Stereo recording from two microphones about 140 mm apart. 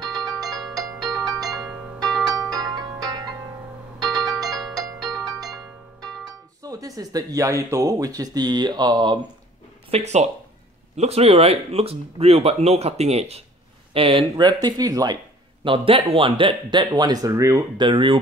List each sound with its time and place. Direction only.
0.0 s music: 30° right (ahead or behind)
0.5 s music: centre (ahead or behind)
1.2 s music: 25° right (ahead or behind)
4.5 s music: centre (ahead or behind)
5.2 s music: 30° right (ahead or behind)
6.0 s music: centre (ahead or behind)
6.6 s speech: 25° right (ahead or behind)
9.8 s speech: 50° right (ahead or behind)
14.3 s speech: 30° right (ahead or behind)
15.6 s speech: 40° right (ahead or behind); by 17.8 s 20° right (ahead or behind)
17.8 s speech: 35° right (ahead or behind)